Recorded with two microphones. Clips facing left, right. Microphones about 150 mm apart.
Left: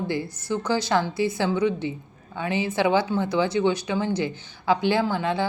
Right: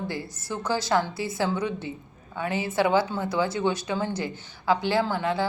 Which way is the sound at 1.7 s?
20° left (ahead or behind).